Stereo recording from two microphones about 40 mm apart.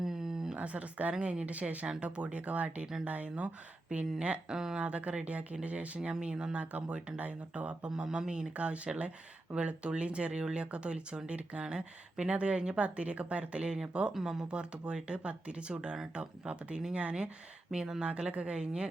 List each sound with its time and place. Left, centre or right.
0.0 s a sound: centre
0.5 s speech: right
4.4 s speech: centre
4.8 s speech: right
6.0 s speech: right
6.6 s speech: right
8.0 s speech: centre
8.5 s speech: right
14.1 s speech: centre
14.4 s speech: right
18.0 s speech: right